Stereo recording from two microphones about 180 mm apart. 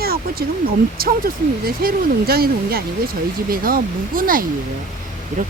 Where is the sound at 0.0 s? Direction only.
55° right (ahead or behind).